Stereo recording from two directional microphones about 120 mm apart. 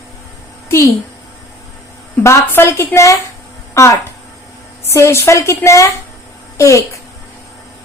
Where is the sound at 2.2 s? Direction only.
20° left (ahead or behind).